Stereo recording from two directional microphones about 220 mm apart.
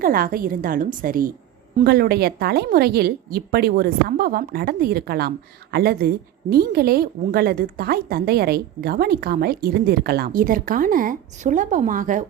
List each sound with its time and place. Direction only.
0.0 s a woman's voice: 40° right (ahead or behind)